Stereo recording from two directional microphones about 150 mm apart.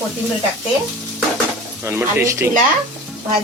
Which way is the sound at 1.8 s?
15° right (ahead or behind).